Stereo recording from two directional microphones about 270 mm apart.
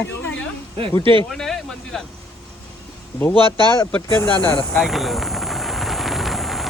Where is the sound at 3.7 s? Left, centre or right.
Centre.